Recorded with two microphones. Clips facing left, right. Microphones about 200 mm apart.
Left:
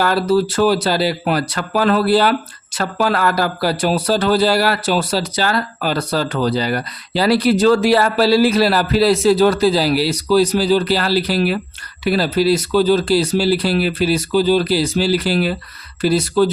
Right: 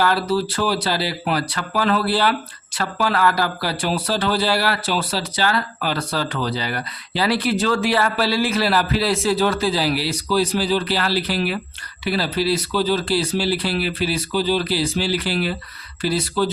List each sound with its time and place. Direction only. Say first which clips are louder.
0.0 s a man's voice: left 4 dB; 45° left (ahead or behind)